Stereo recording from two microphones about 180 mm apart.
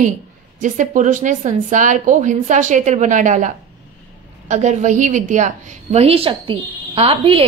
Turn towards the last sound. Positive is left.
turn(degrees=-30)  # may be behind; listen again after turning